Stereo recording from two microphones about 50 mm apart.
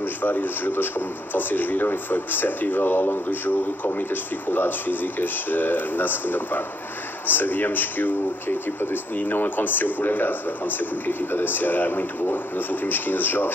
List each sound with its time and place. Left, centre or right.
0.0 s speech: left